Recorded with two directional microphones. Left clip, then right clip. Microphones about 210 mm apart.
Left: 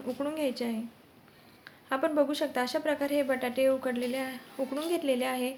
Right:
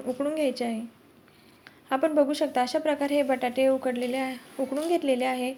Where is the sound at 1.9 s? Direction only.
15° right (ahead or behind).